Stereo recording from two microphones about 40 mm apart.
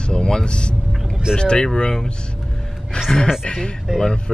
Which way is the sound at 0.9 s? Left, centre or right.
Centre.